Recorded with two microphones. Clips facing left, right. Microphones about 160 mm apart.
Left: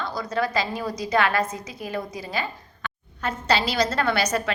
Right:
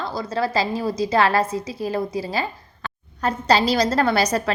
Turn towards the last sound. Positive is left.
turn(degrees=-35)  # may be behind; listen again after turning